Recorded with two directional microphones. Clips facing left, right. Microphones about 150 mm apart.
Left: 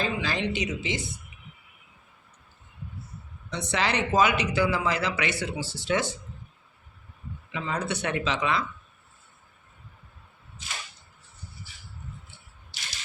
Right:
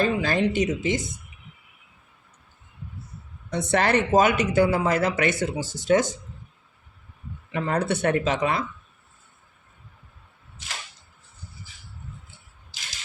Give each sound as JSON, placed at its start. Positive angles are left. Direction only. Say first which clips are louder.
{"t": 0.0, "sound": "speech", "louder": "right 6 dB", "side_deg": -50}
{"t": 3.5, "sound": "speech", "louder": "right 6 dB", "side_deg": -50}
{"t": 7.5, "sound": "speech", "louder": "right 6 dB", "side_deg": -60}